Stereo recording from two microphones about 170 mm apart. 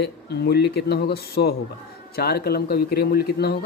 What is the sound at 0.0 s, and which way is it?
Speech, 70° left (ahead or behind).